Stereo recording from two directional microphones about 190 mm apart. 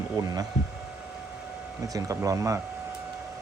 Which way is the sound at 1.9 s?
15° right (ahead or behind).